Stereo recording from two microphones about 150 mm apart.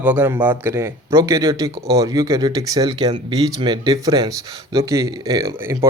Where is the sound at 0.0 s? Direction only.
10° right (ahead or behind).